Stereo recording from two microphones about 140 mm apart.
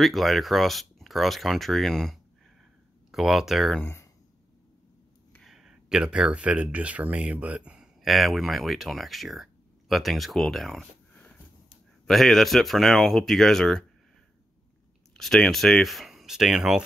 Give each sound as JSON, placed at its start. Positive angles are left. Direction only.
{"t": 0.0, "sound": "speech", "side_deg": 0}
{"t": 3.8, "sound": "speech", "side_deg": 15}
{"t": 5.4, "sound": "speech", "side_deg": -5}
{"t": 12.1, "sound": "speech", "side_deg": 0}
{"t": 15.1, "sound": "speech", "side_deg": 0}